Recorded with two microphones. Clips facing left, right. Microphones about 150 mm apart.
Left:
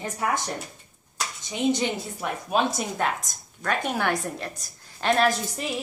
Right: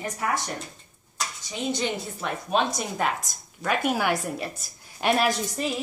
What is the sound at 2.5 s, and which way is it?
A woman's voice, 5° left (ahead or behind).